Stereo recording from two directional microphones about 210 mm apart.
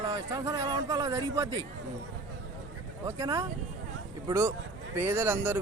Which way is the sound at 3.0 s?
15° right (ahead or behind).